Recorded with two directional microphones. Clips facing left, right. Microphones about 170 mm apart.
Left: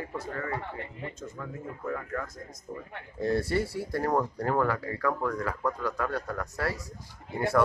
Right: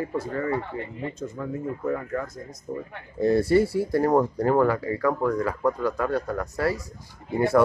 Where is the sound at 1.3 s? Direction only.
15° right (ahead or behind).